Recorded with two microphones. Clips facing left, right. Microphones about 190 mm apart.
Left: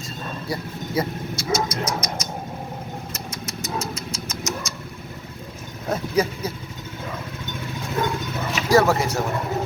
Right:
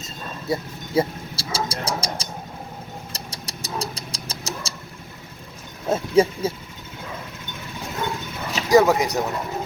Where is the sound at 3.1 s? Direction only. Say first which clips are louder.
Left 4 dB; 35° right (ahead or behind).